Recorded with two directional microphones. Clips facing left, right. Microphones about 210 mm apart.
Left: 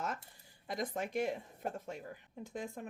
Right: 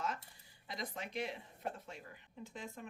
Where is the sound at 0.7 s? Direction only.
50° left (ahead or behind).